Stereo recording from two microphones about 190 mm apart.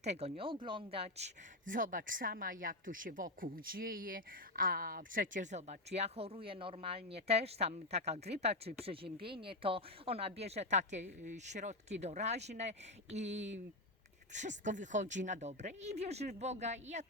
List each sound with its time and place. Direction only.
0.0 s speech: 35° right (ahead or behind)
1.7 s a woman's voice: 45° right (ahead or behind)